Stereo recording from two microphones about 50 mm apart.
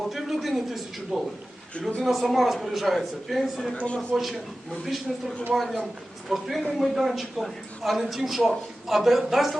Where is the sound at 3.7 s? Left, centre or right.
Left.